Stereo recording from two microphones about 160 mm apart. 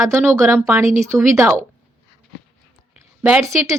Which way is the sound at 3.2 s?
5° right (ahead or behind).